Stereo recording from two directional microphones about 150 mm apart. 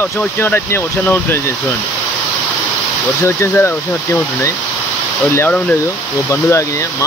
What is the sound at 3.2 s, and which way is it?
Speech, 15° left (ahead or behind).